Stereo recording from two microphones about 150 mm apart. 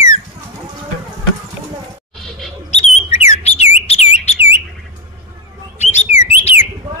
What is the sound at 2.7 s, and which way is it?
Bird, 45° left (ahead or behind).